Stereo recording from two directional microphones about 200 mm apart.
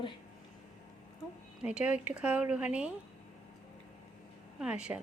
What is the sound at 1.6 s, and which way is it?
A woman's voice, 5° right (ahead or behind).